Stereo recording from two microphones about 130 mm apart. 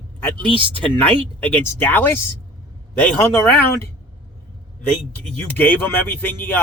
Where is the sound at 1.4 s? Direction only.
15° left (ahead or behind).